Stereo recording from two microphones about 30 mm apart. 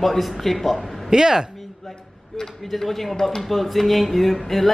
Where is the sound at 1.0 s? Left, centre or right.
Right.